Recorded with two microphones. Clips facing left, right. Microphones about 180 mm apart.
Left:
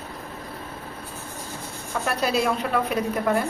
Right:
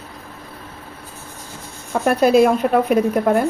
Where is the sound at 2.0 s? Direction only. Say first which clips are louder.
Right 10 dB; 50° right (ahead or behind).